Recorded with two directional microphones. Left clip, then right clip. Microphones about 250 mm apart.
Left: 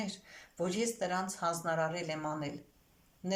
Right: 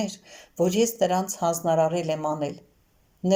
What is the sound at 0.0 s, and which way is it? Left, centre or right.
Speech, right.